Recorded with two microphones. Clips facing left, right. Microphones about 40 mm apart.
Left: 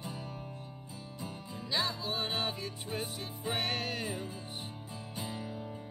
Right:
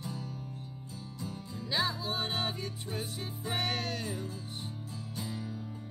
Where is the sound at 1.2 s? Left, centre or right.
Centre.